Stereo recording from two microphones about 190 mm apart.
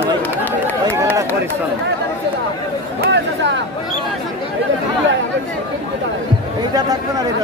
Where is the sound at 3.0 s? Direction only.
65° right (ahead or behind).